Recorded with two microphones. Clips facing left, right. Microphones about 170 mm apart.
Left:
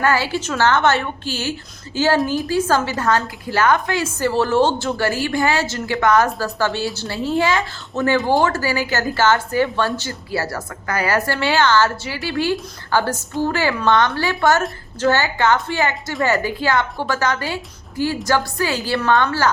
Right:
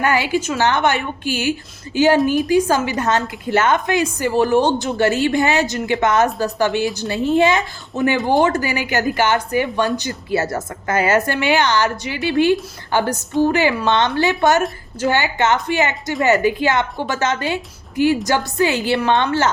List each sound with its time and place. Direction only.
0.0 s a woman's voice: 15° right (ahead or behind)